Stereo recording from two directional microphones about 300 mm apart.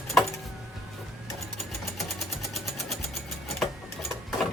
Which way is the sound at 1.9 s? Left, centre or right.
Centre.